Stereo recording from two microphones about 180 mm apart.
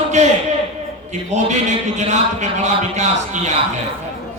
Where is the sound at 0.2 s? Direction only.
40° right (ahead or behind).